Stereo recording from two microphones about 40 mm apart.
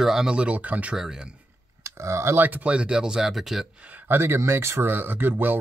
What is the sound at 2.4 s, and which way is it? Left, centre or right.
Speech, right.